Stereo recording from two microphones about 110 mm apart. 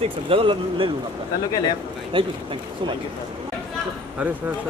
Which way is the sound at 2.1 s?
50° right (ahead or behind).